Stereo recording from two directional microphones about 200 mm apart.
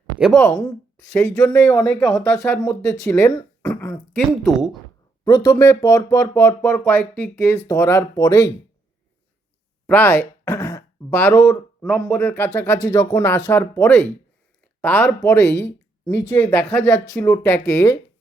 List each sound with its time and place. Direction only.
0.4 s speech: centre (ahead or behind)
1.8 s speech: centre (ahead or behind)
2.3 s speech: 15° left (ahead or behind)
4.2 s speech: centre (ahead or behind)
5.2 s speech: 20° left (ahead or behind)
9.8 s speech: 10° left (ahead or behind)